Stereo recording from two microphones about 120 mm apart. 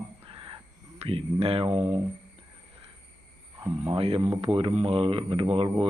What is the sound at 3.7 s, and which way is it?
A man's voice, 60° right (ahead or behind).